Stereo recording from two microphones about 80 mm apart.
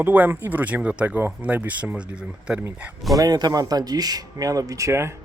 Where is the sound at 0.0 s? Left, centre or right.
Right.